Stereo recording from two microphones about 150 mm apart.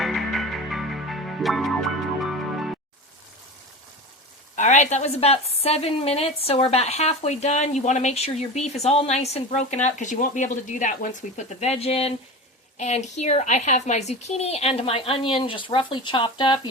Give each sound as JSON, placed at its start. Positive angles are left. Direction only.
{"t": 0.0, "sound": "music", "side_deg": 0}
{"t": 4.5, "sound": "a woman's voice", "side_deg": 55}